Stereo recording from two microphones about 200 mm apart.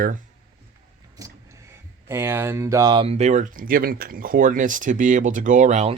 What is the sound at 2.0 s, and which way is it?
Speech, 15° right (ahead or behind).